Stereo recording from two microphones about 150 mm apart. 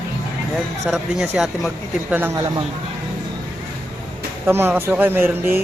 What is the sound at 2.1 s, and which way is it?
Speech, 15° right (ahead or behind).